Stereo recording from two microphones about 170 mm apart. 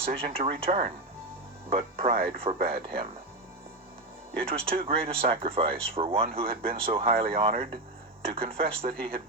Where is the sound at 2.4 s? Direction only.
35° right (ahead or behind).